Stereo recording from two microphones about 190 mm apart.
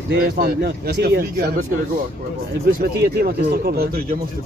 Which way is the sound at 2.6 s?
55° right (ahead or behind).